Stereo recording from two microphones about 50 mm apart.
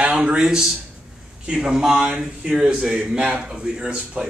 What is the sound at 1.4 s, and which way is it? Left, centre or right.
A man's voice, centre.